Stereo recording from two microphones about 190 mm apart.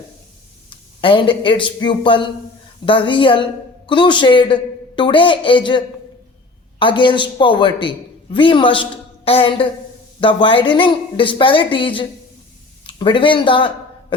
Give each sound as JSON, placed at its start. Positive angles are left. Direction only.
{"t": 1.0, "sound": "a man's voice", "side_deg": 25}